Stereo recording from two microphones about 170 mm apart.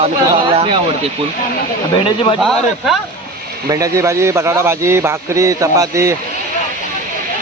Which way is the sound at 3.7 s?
20° right (ahead or behind).